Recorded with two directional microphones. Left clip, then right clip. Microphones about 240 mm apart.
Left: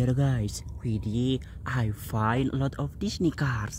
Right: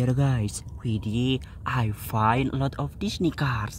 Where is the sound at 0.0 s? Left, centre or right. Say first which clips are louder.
Right 2 dB; centre.